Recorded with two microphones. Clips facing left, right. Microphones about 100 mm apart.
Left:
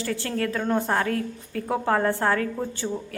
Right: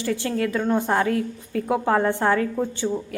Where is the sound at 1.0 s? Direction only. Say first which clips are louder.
Right 3 dB; 30° right (ahead or behind).